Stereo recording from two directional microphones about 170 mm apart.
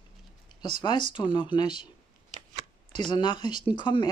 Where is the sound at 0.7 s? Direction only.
30° left (ahead or behind).